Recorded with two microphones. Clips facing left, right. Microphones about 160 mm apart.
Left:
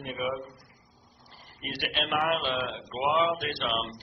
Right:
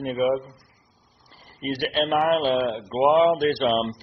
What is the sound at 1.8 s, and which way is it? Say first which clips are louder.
Speech: right 7 dB; 40° right (ahead or behind).